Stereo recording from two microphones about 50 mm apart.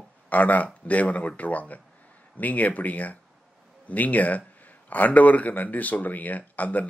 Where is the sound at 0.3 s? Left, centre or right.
Left.